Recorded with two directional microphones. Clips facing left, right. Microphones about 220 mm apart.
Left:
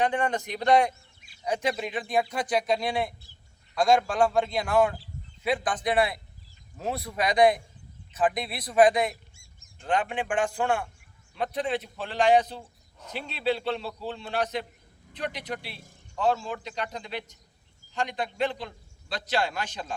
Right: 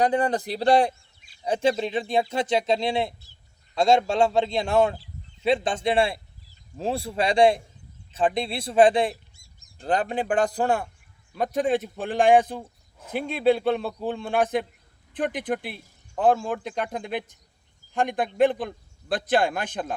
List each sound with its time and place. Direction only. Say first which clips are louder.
0.0 s a man's voice: right 4 dB; 35° right (ahead or behind); by 19.9 s 55° right (ahead or behind)